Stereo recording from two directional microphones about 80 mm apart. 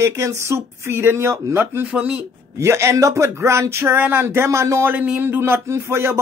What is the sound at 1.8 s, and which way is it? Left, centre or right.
Speech, centre.